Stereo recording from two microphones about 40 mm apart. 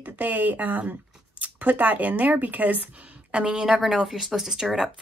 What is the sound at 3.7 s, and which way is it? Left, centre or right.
Speech, centre.